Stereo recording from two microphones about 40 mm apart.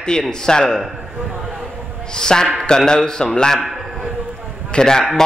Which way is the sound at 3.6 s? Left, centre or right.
Centre.